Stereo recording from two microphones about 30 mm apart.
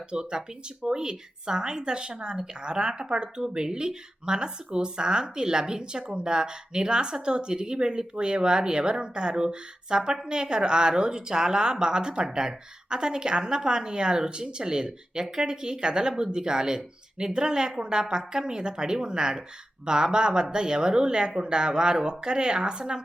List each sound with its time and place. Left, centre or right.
0.1 s a woman's voice: right